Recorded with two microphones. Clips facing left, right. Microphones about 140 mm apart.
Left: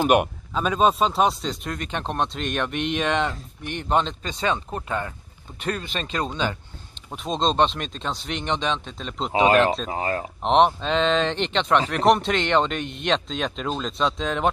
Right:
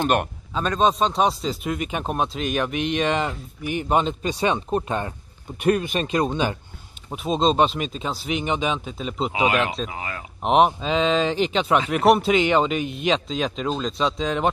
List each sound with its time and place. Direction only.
0.0 s a man's voice: 10° left (ahead or behind)
9.5 s speech: 35° left (ahead or behind)
10.4 s a man's voice: 5° right (ahead or behind)